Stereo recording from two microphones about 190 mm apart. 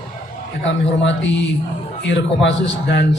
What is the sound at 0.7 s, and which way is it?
A man's voice, 75° left (ahead or behind).